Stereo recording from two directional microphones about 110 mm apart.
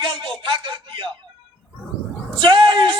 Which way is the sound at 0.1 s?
50° right (ahead or behind).